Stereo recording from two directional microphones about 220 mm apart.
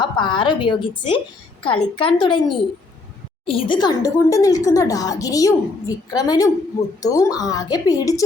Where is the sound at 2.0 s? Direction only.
20° left (ahead or behind).